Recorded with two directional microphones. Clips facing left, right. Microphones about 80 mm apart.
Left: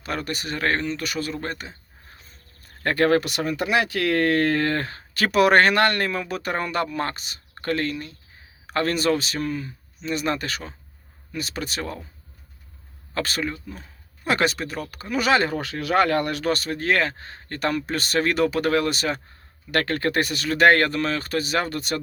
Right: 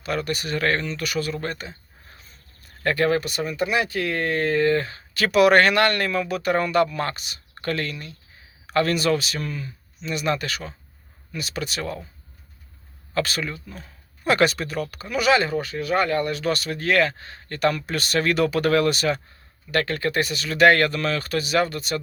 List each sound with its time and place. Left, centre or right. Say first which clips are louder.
0.0 s speech: right 3 dB; left
2.8 s speech: left 1 dB; left
3.2 s speech: left 1 dB; left
13.1 s speech: right 1 dB; left
15.5 s speech: left 1 dB; left
16.4 s speech: left 1 dB; left
19.7 s speech: left 1 dB; left